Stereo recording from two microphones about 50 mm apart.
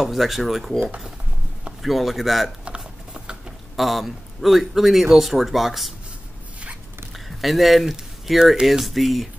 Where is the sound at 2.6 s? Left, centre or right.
Centre.